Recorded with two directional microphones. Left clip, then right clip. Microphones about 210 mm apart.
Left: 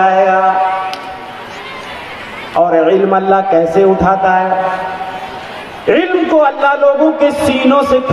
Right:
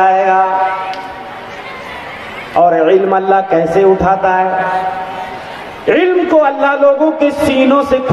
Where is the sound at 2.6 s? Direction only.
25° right (ahead or behind).